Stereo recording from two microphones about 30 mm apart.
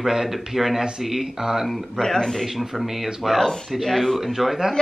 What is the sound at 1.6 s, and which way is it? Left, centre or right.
Speech, centre.